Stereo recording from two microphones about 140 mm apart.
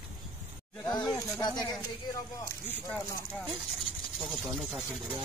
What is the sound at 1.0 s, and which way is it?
Snake, centre (ahead or behind).